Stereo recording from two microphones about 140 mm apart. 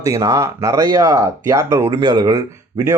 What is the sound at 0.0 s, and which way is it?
Speech, 25° right (ahead or behind).